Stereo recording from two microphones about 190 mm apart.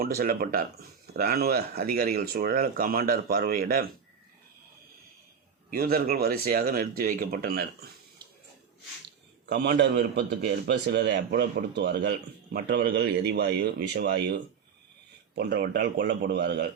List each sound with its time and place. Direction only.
0.0 s speech: 50° right (ahead or behind)
5.7 s speech: 55° right (ahead or behind)
9.5 s speech: 60° right (ahead or behind)
15.4 s speech: 55° right (ahead or behind)